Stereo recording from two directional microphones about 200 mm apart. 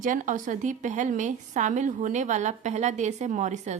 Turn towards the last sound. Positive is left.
turn(degrees=-35)  # may be behind; listen again after turning